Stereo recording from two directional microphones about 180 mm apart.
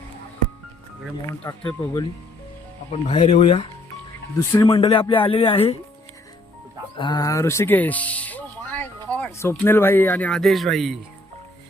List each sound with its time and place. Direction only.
1.3 s speech: 20° left (ahead or behind)
2.9 s speech: 35° left (ahead or behind)
4.4 s speech: 15° left (ahead or behind)
4.7 s speech: 30° left (ahead or behind)
6.9 s speech: 25° left (ahead or behind); by 10.9 s centre (ahead or behind)